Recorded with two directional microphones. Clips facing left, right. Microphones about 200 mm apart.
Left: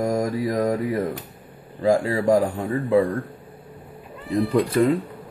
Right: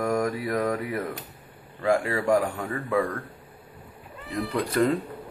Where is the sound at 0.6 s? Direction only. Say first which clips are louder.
Left 5 dB; 25° left (ahead or behind).